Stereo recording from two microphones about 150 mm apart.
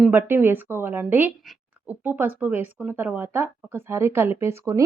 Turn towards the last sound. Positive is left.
turn(degrees=-20)  # may be behind; listen again after turning